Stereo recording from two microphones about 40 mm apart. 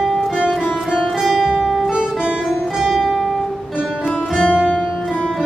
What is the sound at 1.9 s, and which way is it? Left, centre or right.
Music, right.